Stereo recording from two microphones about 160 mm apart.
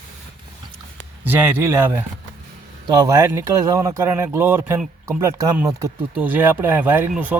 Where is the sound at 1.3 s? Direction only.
10° right (ahead or behind).